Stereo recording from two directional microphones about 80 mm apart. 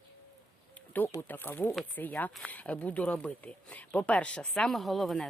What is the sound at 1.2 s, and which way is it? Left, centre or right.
Speech, left.